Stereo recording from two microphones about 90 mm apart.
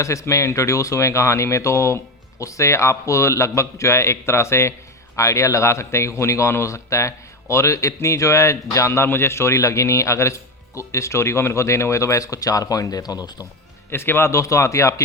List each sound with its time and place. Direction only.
0.0 s speech: 35° left (ahead or behind)
13.9 s speech: 25° left (ahead or behind)